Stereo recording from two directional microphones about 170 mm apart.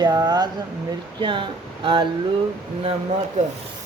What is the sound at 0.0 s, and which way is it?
Speech, 25° right (ahead or behind).